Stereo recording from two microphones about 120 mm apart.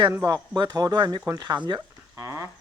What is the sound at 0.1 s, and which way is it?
Speech, 30° right (ahead or behind).